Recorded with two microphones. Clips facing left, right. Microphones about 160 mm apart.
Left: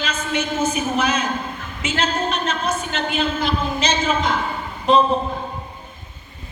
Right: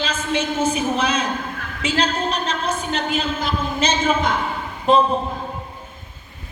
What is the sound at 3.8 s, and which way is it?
Speech, 50° right (ahead or behind).